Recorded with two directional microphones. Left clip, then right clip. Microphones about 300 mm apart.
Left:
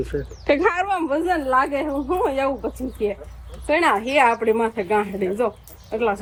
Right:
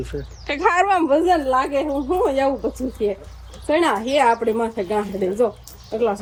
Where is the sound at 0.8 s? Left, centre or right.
Right.